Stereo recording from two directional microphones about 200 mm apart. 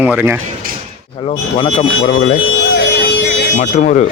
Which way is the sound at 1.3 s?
25° left (ahead or behind).